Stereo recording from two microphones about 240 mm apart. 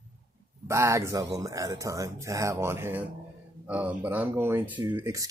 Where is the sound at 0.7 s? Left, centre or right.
Centre.